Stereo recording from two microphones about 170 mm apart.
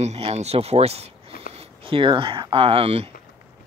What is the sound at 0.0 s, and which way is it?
Speech, 40° right (ahead or behind).